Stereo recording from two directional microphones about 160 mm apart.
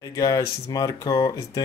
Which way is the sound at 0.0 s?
20° left (ahead or behind).